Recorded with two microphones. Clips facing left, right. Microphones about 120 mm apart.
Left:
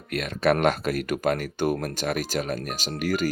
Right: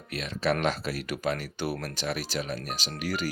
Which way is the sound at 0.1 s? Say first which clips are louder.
Left 5 dB; 55° left (ahead or behind).